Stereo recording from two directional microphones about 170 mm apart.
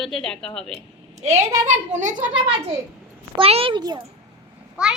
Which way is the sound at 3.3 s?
35° right (ahead or behind).